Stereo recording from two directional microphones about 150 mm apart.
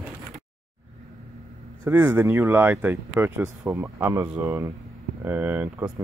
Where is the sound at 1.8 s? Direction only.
10° right (ahead or behind).